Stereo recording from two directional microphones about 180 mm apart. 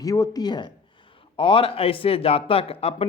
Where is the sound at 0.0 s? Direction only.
20° left (ahead or behind).